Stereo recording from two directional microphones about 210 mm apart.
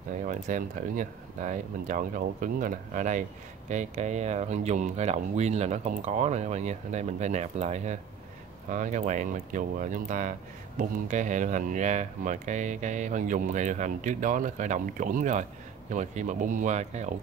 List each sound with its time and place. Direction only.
0.1 s speech: 35° right (ahead or behind)